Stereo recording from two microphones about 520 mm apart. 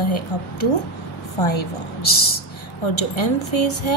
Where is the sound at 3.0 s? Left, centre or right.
Left.